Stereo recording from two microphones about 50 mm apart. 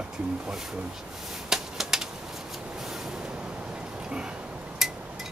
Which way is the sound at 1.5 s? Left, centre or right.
Centre.